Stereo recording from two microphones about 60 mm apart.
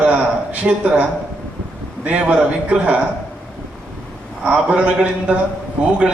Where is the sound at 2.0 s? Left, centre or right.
Right.